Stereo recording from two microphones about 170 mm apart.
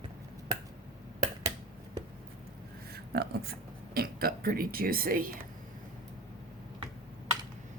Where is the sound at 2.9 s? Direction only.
70° right (ahead or behind).